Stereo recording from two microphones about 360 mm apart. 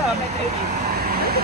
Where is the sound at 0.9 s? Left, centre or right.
Right.